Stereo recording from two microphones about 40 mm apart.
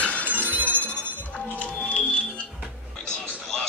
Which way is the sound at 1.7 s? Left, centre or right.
Left.